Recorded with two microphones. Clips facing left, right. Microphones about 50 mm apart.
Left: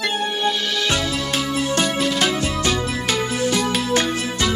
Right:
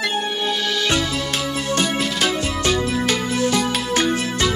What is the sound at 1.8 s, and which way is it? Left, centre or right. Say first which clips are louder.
Music: even; centre.